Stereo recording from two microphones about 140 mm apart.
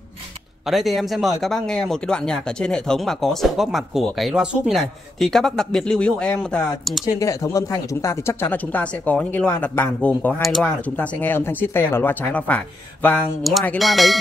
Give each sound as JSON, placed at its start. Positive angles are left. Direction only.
{"t": 0.7, "sound": "a man's voice", "side_deg": 0}
{"t": 7.2, "sound": "a man's voice", "side_deg": 25}
{"t": 11.0, "sound": "speech", "side_deg": 15}
{"t": 13.4, "sound": "a man's voice", "side_deg": 0}